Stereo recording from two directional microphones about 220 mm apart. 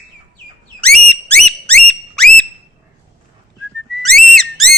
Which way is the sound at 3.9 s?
Centre (ahead or behind).